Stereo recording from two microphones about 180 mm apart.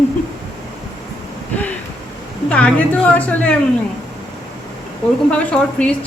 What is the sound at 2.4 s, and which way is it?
A woman's voice, 5° left (ahead or behind).